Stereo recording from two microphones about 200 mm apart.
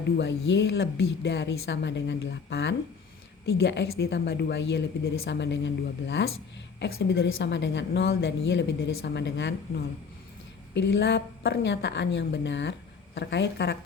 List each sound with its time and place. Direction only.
0.2 s a woman's voice: 60° left (ahead or behind)
10.8 s a woman's voice: 60° left (ahead or behind)